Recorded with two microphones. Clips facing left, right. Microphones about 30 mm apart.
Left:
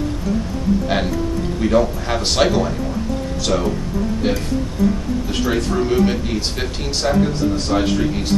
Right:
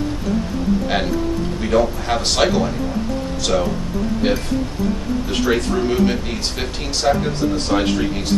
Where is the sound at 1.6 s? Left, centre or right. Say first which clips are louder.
Left 1 dB; centre.